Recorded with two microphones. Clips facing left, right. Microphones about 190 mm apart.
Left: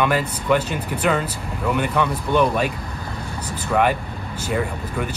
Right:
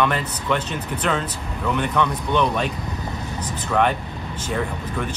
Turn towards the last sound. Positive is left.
turn(degrees=5)  # may be behind; listen again after turning